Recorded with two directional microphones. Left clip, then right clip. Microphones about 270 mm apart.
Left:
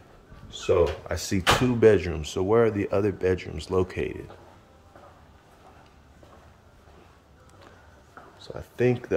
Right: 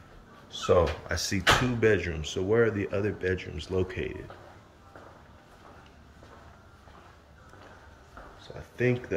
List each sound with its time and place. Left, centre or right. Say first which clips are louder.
1.0 s speech: left 1 dB; centre
8.5 s speech: left 4 dB; left